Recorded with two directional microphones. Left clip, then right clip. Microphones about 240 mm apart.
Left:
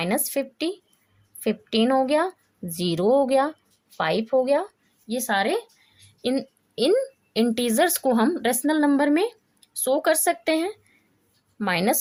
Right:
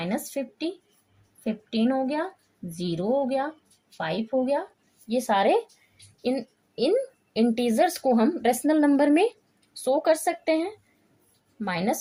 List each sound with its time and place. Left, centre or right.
0.0 s a woman's voice: left
5.0 s a woman's voice: left
9.8 s speech: left